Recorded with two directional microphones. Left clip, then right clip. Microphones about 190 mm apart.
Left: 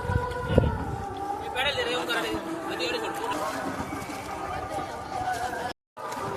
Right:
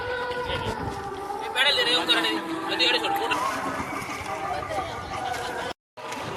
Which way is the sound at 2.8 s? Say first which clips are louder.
Right 8 dB; 45° left (ahead or behind).